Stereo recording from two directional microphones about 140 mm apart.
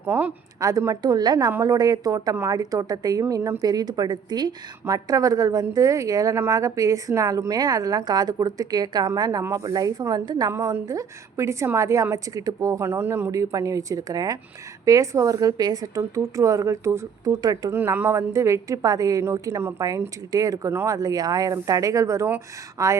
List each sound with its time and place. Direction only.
0.0 s a woman's voice: 15° right (ahead or behind)
17.7 s a woman's voice: 15° right (ahead or behind)